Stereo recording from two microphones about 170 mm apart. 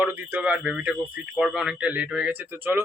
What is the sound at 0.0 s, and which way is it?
Speech, 10° right (ahead or behind).